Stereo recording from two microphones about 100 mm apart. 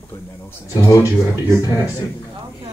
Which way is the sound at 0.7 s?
35° left (ahead or behind).